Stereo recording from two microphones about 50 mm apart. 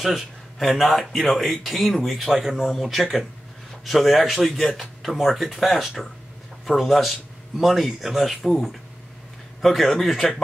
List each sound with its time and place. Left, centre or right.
0.0 s speech: centre
9.6 s speech: centre